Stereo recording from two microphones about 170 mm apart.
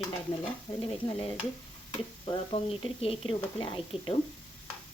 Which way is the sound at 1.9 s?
30° left (ahead or behind).